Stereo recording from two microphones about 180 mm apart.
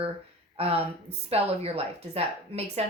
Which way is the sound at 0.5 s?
35° right (ahead or behind).